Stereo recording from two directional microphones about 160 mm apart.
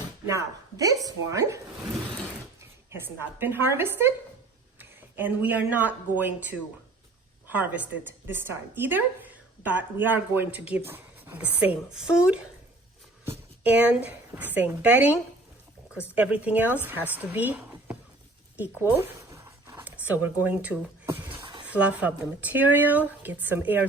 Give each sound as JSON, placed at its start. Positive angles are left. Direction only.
{"t": 0.3, "sound": "a woman's voice", "side_deg": -20}
{"t": 7.5, "sound": "a woman's voice", "side_deg": -10}
{"t": 21.2, "sound": "a sound", "side_deg": -30}
{"t": 21.7, "sound": "a woman's voice", "side_deg": -10}